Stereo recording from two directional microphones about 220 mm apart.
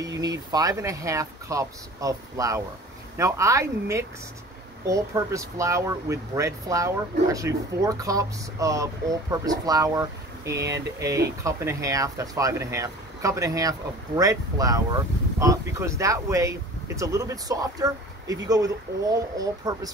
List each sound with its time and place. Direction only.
0.0 s speech: 15° right (ahead or behind)